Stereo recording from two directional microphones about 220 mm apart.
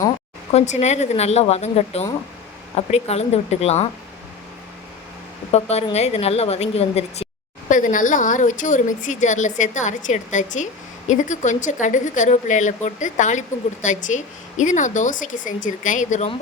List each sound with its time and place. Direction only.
0.5 s speech: 30° left (ahead or behind)
5.5 s a woman's voice: 30° left (ahead or behind)